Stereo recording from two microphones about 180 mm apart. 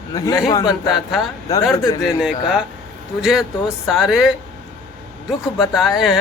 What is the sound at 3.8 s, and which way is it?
A man's voice, centre (ahead or behind).